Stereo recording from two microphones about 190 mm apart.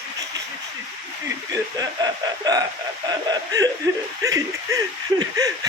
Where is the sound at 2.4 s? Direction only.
20° right (ahead or behind).